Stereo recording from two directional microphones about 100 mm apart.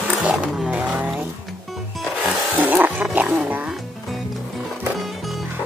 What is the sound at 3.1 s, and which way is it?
Roaring cats, 15° right (ahead or behind).